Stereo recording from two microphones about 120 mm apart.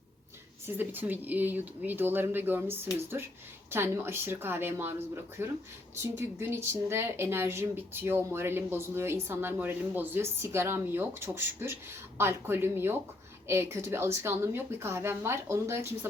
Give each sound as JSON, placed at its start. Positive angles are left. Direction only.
{"t": 0.8, "sound": "speech", "side_deg": -15}